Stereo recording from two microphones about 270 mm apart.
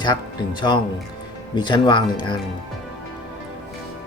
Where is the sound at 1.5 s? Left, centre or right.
Centre.